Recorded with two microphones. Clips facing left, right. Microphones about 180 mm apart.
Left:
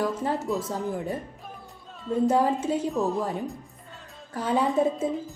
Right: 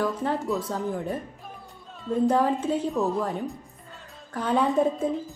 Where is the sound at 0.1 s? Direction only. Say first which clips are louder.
Even; 5° left (ahead or behind).